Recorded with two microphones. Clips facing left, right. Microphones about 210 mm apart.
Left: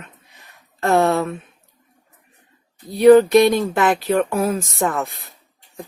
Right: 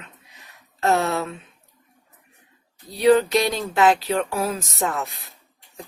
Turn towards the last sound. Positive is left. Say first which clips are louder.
# left 4 dB
turn(degrees=50)  # may be behind; listen again after turning